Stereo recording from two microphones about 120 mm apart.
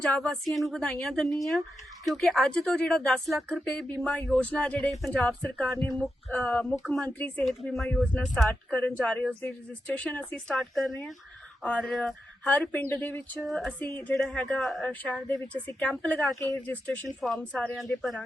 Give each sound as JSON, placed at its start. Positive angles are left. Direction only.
{"t": 0.0, "sound": "a woman's voice", "side_deg": 5}
{"t": 7.1, "sound": "speech", "side_deg": 15}
{"t": 7.4, "sound": "a woman's voice", "side_deg": 0}
{"t": 12.7, "sound": "speech", "side_deg": 15}
{"t": 13.4, "sound": "a woman's voice", "side_deg": 5}